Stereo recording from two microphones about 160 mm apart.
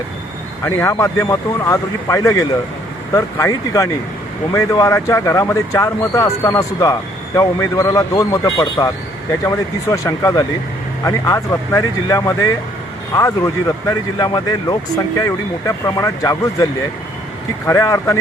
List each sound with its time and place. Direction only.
0.6 s speech: 15° left (ahead or behind)
17.7 s speech: 20° left (ahead or behind)